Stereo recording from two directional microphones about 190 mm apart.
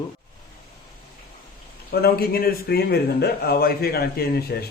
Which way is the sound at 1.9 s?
55° left (ahead or behind).